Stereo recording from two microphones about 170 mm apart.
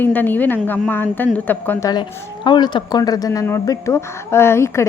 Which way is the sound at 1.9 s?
25° left (ahead or behind).